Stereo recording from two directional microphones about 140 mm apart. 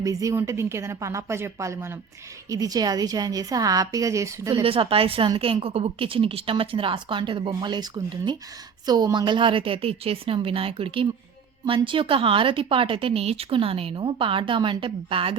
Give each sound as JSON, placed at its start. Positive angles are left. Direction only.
{"t": 0.0, "sound": "a woman's voice", "side_deg": -25}
{"t": 4.6, "sound": "a woman's voice", "side_deg": -40}